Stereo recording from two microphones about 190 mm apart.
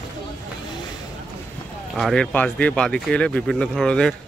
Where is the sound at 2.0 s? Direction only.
5° left (ahead or behind).